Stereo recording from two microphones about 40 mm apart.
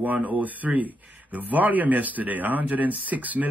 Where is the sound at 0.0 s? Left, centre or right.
Right.